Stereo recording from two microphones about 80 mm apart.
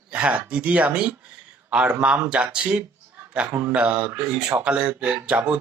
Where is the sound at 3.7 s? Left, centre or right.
Centre.